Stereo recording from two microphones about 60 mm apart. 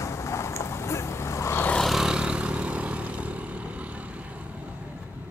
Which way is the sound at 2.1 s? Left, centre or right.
Centre.